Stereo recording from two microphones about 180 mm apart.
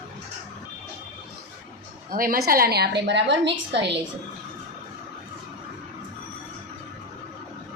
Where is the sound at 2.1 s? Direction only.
50° right (ahead or behind); by 3.5 s 75° right (ahead or behind).